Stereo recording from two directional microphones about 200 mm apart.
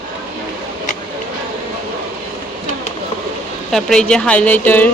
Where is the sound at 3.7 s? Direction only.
Centre (ahead or behind).